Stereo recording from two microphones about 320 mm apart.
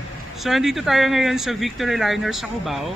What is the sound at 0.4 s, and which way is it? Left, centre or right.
A man's voice, centre.